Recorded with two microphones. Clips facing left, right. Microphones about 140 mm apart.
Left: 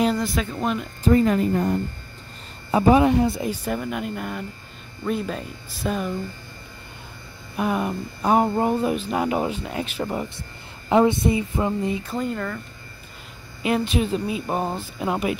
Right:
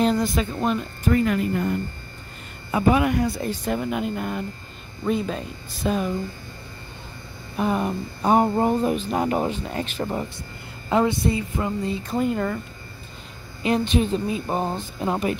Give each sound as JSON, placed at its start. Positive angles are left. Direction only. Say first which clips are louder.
{"t": 0.0, "sound": "speech", "louder": "right 1 dB", "side_deg": 0}
{"t": 1.0, "sound": "speech", "louder": "left 3 dB", "side_deg": 35}
{"t": 2.7, "sound": "speech", "louder": "left 3 dB", "side_deg": 25}
{"t": 3.4, "sound": "speech", "louder": "even", "side_deg": 10}
{"t": 3.7, "sound": "speech", "louder": "right 2 dB", "side_deg": 0}
{"t": 7.5, "sound": "speech", "louder": "right 1 dB", "side_deg": 5}
{"t": 10.9, "sound": "speech", "louder": "left 3 dB", "side_deg": 20}
{"t": 12.1, "sound": "speech", "louder": "right 3 dB", "side_deg": -15}
{"t": 13.6, "sound": "speech", "louder": "right 1 dB", "side_deg": 5}